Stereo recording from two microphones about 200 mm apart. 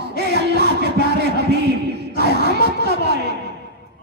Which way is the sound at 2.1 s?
55° right (ahead or behind).